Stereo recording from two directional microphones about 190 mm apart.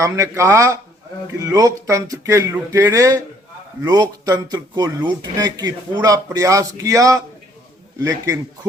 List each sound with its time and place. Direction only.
0.0 s speech: 15° right (ahead or behind)